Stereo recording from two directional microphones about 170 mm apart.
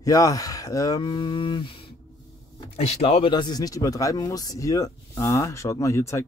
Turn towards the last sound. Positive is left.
turn(degrees=15)  # may be behind; listen again after turning